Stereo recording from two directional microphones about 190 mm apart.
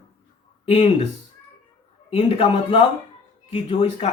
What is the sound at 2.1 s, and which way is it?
Speech, 30° left (ahead or behind).